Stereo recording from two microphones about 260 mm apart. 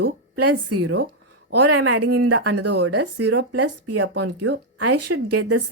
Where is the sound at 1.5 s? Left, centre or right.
Right.